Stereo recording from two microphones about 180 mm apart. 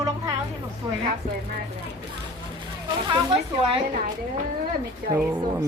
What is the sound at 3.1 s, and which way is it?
Speech, 25° right (ahead or behind).